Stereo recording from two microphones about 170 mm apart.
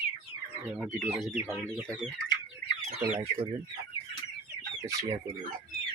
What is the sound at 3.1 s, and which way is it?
Speech, 35° right (ahead or behind).